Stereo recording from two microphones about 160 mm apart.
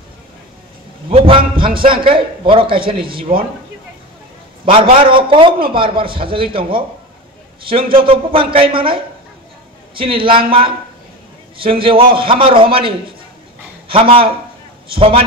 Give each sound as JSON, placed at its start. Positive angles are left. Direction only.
{"t": 1.1, "sound": "a man's voice", "side_deg": -35}
{"t": 4.9, "sound": "a man's voice", "side_deg": -30}